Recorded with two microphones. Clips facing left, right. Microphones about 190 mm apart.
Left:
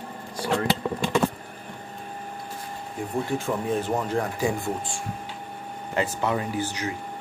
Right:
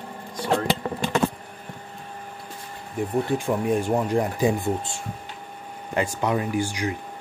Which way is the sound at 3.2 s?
15° right (ahead or behind).